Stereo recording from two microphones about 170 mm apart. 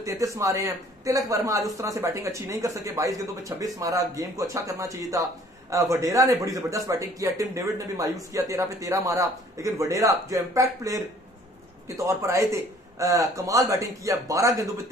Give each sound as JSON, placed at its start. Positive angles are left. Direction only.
{"t": 0.0, "sound": "a man's voice", "side_deg": -20}